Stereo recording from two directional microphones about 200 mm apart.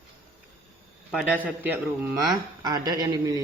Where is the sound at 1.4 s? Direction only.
10° right (ahead or behind).